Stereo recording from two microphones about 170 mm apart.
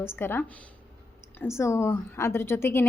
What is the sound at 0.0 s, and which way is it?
A woman's voice, 15° left (ahead or behind).